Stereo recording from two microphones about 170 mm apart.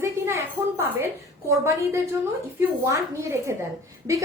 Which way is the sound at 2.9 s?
15° right (ahead or behind).